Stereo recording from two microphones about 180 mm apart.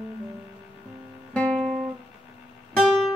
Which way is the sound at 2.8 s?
Centre (ahead or behind).